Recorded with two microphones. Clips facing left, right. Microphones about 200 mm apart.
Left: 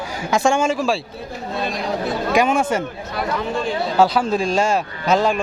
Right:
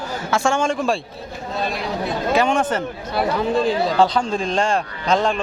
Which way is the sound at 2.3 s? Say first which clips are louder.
Left 1 dB; 10° left (ahead or behind).